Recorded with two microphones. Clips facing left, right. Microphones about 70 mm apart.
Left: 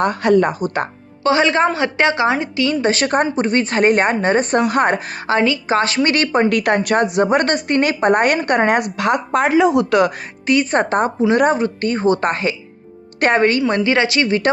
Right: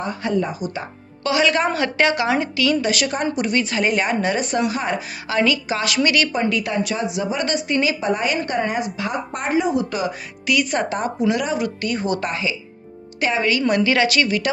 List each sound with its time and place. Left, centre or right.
0.0 s a woman's voice: left
1.2 s a woman's voice: left
4.7 s speech: left
5.4 s a woman's voice: left
6.5 s a woman's voice: left
10.4 s a woman's voice: left
12.3 s a woman's voice: left
13.7 s a woman's voice: left